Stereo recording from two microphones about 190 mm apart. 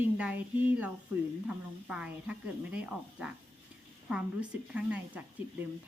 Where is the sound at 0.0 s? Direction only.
5° right (ahead or behind).